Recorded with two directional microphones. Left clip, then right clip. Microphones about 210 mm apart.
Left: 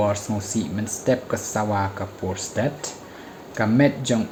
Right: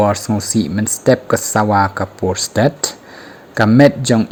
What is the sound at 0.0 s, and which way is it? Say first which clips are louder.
Speech: right 8 dB; 50° right (ahead or behind).